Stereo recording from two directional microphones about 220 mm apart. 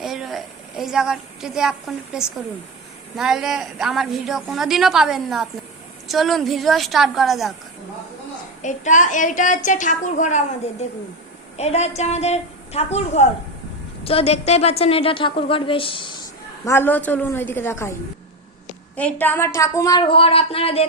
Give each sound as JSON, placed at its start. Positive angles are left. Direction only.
{"t": 0.0, "sound": "a sound", "side_deg": 0}
{"t": 2.1, "sound": "a woman's voice", "side_deg": -5}
{"t": 8.6, "sound": "a woman's voice", "side_deg": 35}
{"t": 16.6, "sound": "a woman's voice", "side_deg": 10}
{"t": 18.9, "sound": "a woman's voice", "side_deg": 5}